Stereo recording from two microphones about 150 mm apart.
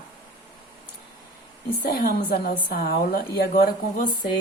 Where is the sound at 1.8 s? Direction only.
90° left; by 4.3 s 65° left (ahead or behind).